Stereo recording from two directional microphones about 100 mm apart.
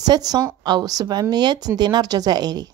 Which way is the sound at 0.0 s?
40° right (ahead or behind).